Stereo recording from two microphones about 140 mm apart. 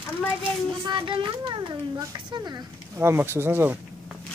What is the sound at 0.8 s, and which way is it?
A woman's voice, 35° right (ahead or behind).